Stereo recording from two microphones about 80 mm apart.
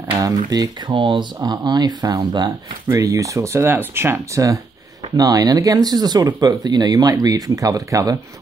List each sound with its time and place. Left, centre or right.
0.2 s speech: right
0.9 s speech: right
2.9 s speech: right
5.1 s speech: right